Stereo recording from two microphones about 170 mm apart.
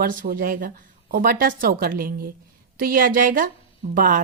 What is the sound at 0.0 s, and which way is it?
A woman's voice, 55° right (ahead or behind).